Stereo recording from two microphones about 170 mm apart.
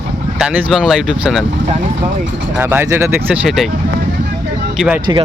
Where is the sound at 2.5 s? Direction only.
15° right (ahead or behind).